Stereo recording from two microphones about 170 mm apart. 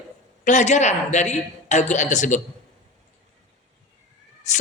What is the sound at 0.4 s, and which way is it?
Speech, 45° left (ahead or behind).